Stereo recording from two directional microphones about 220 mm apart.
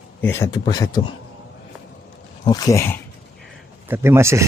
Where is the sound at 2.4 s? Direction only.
15° left (ahead or behind).